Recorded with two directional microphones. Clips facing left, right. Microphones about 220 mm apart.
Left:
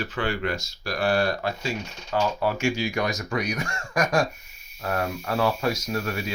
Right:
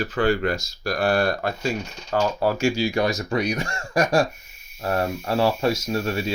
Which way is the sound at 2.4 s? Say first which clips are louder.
Right 4 dB; 35° right (ahead or behind).